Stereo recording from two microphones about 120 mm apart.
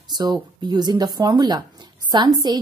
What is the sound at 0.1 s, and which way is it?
Speech, 35° right (ahead or behind).